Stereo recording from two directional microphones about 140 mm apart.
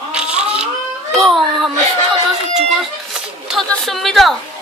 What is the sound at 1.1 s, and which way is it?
Speech, centre (ahead or behind).